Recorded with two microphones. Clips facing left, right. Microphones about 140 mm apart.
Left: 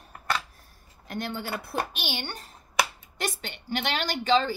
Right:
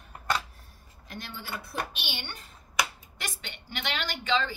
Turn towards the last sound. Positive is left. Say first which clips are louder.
# left 5 dB
turn(degrees=40)  # may be behind; listen again after turning